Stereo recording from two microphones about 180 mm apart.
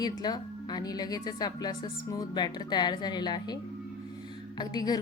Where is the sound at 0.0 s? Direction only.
20° left (ahead or behind).